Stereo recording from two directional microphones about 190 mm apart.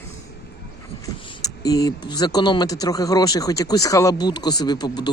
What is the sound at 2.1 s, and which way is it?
Speech, 20° left (ahead or behind).